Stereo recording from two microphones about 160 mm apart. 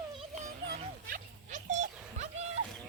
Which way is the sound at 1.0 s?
55° right (ahead or behind).